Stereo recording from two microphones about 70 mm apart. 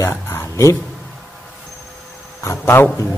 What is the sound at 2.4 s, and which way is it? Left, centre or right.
Speech, left.